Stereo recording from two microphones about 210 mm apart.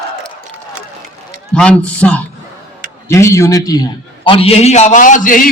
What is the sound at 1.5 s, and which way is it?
A man's voice, 5° left (ahead or behind).